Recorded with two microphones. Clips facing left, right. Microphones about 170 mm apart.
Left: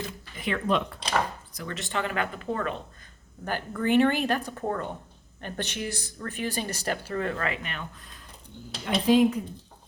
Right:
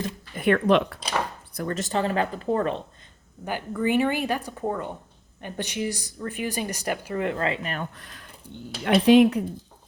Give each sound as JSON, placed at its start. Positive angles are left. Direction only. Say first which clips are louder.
{"t": 0.3, "sound": "speech", "louder": "right 7 dB", "side_deg": -60}
{"t": 1.5, "sound": "speech", "louder": "right 6 dB", "side_deg": -45}
{"t": 3.4, "sound": "speech", "louder": "right 2 dB", "side_deg": -10}
{"t": 7.9, "sound": "speech", "louder": "right 3 dB", "side_deg": -75}